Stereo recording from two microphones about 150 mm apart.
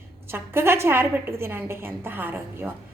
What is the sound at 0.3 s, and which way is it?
A woman's voice, 15° right (ahead or behind).